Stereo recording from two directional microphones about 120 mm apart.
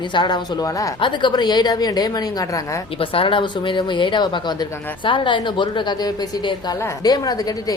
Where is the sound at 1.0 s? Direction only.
40° left (ahead or behind).